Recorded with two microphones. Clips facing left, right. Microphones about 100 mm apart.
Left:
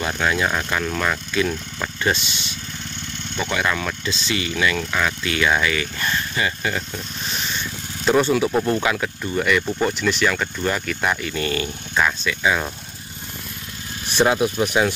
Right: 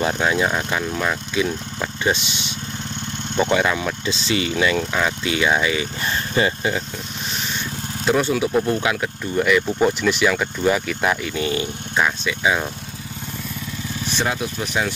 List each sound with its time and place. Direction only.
0.0 s speech: 20° right (ahead or behind)
3.4 s speech: 20° right (ahead or behind)
8.0 s speech: 5° right (ahead or behind)
14.1 s speech: 15° left (ahead or behind)